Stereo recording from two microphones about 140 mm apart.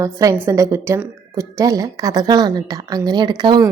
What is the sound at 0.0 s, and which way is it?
A woman's voice, 20° right (ahead or behind).